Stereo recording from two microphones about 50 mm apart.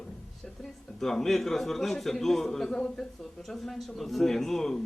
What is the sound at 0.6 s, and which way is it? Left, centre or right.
A man's voice, centre.